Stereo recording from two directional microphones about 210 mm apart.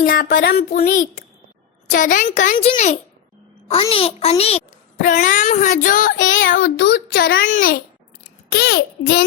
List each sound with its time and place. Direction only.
0.0 s a child's voice: 40° left (ahead or behind)
6.1 s a child's voice: 65° left (ahead or behind)